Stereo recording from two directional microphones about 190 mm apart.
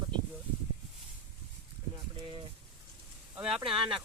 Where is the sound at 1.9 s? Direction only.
25° right (ahead or behind).